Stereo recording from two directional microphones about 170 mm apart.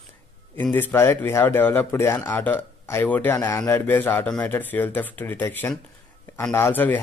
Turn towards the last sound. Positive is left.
turn(degrees=10)  # may be behind; listen again after turning